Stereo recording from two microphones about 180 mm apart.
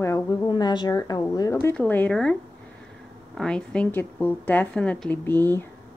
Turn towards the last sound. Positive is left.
turn(degrees=10)  # may be behind; listen again after turning